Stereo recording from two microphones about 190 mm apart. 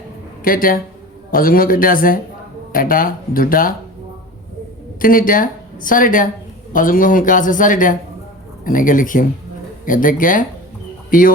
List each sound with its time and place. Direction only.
0.4 s speech: 50° left (ahead or behind)
4.9 s a woman's voice: 45° left (ahead or behind)